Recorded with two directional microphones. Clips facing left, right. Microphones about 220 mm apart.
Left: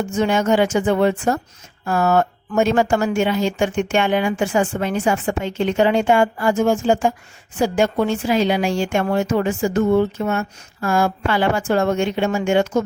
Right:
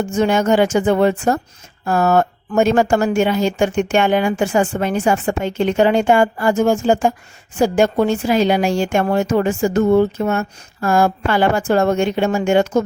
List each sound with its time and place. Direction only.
0.2 s a woman's voice: 45° right (ahead or behind)